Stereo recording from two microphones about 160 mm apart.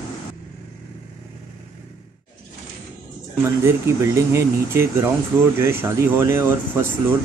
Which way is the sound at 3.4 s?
15° right (ahead or behind).